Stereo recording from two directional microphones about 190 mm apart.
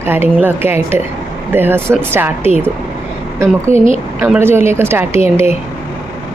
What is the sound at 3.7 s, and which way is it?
Speech, 30° left (ahead or behind).